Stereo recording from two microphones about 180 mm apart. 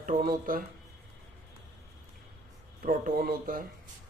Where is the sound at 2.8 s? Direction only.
50° right (ahead or behind).